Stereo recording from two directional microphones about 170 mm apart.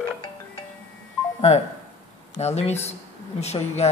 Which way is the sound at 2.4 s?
40° left (ahead or behind).